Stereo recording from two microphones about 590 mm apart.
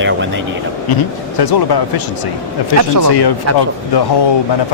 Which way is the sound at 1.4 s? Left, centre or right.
Left.